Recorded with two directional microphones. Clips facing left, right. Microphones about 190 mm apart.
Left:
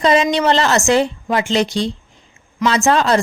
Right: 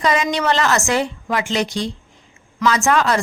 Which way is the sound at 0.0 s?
30° left (ahead or behind).